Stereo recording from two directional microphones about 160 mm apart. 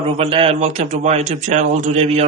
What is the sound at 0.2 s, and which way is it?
A man's voice, 35° right (ahead or behind).